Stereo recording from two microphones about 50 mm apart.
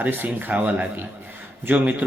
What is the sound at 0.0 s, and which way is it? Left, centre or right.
A man's voice, right.